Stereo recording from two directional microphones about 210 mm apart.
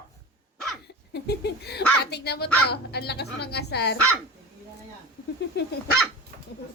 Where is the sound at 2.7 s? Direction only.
50° left (ahead or behind).